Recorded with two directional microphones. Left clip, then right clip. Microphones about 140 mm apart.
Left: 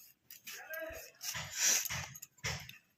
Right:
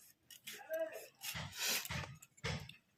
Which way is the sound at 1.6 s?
Centre (ahead or behind).